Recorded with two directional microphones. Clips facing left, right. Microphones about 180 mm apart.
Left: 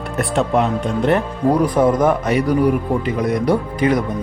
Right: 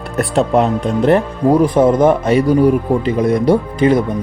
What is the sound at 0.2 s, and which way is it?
Speech, 35° right (ahead or behind).